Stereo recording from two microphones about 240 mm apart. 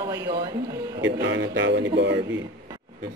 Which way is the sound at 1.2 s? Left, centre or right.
Right.